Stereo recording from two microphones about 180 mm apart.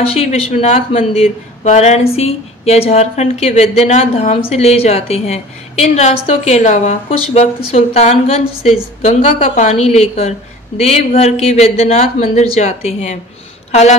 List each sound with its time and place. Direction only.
0.1 s a woman's voice: 35° left (ahead or behind)